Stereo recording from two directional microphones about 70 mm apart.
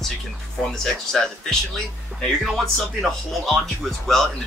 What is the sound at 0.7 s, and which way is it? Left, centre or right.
Speech, centre.